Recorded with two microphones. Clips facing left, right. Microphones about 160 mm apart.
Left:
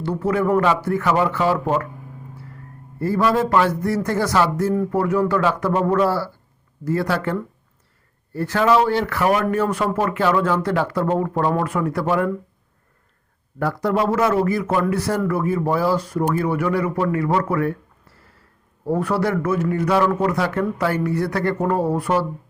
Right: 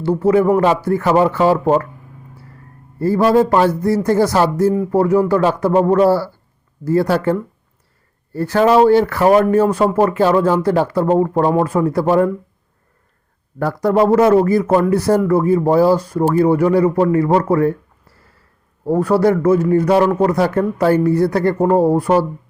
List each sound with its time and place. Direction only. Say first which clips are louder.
0.0 s speech: right 7 dB; 30° right (ahead or behind)
3.0 s speech: right 6 dB; 35° right (ahead or behind)
13.6 s speech: right 6 dB; 40° right (ahead or behind)
18.9 s speech: right 7 dB; 35° right (ahead or behind)